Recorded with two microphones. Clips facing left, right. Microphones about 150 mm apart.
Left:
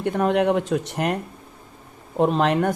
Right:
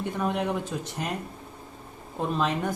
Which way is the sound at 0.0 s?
70° left (ahead or behind).